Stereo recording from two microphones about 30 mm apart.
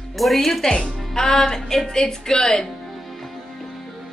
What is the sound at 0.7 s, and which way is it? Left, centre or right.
Speech, left.